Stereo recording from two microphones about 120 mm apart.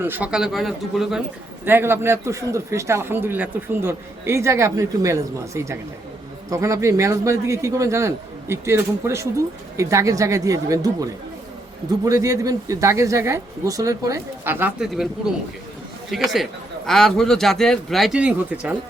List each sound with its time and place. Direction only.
0.0 s speech: 15° right (ahead or behind)
0.3 s speech: 5° right (ahead or behind)
1.6 s a man's voice: 20° right (ahead or behind)
15.3 s speech: 5° right (ahead or behind)
18.2 s speech: 10° right (ahead or behind)